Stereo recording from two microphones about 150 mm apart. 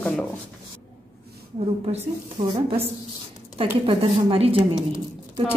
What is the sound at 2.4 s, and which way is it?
Speech, 60° right (ahead or behind).